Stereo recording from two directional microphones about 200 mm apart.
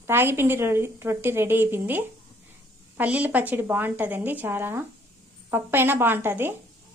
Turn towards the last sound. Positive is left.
turn(degrees=-10)  # may be behind; listen again after turning